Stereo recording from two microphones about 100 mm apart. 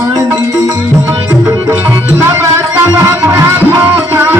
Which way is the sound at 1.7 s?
25° right (ahead or behind).